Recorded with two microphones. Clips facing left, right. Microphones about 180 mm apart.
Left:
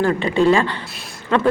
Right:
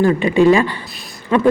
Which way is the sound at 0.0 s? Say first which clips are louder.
Right 4 dB; 15° right (ahead or behind).